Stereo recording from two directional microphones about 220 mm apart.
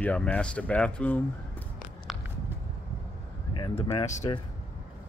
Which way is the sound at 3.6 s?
25° left (ahead or behind).